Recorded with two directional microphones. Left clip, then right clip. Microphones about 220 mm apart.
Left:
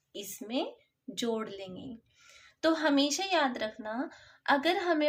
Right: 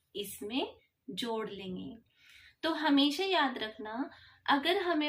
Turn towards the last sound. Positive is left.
turn(degrees=55)  # may be behind; listen again after turning